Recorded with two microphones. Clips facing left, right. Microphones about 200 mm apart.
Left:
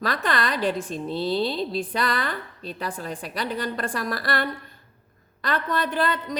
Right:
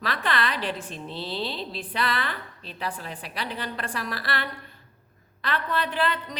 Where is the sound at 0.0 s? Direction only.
45° left (ahead or behind).